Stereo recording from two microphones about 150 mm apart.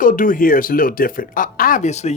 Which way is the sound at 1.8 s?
50° left (ahead or behind).